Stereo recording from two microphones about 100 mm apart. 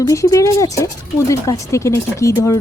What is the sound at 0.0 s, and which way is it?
A woman's voice, 35° left (ahead or behind).